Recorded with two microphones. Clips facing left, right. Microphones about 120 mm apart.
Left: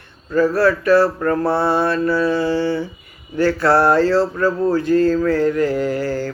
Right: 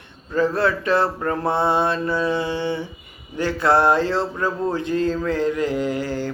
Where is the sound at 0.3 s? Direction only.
20° right (ahead or behind).